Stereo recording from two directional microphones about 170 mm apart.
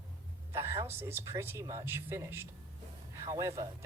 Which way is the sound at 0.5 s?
15° right (ahead or behind).